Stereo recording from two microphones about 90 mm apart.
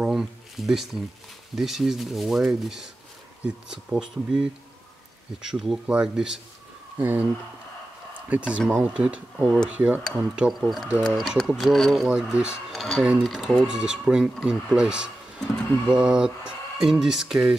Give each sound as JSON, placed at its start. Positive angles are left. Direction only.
{"t": 0.0, "sound": "a sound", "side_deg": -5}
{"t": 1.5, "sound": "speech", "side_deg": -5}
{"t": 8.3, "sound": "speech", "side_deg": -15}
{"t": 10.6, "sound": "speech", "side_deg": 0}